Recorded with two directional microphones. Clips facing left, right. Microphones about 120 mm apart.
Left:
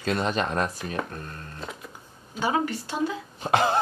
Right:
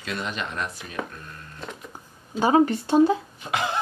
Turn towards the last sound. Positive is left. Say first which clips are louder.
# left 5 dB
turn(degrees=40)  # may be behind; listen again after turning